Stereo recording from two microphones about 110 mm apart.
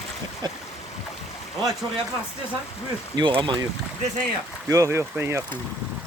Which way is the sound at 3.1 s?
45° right (ahead or behind).